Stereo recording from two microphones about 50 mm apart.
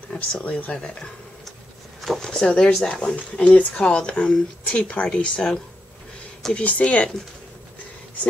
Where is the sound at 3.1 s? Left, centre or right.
Left.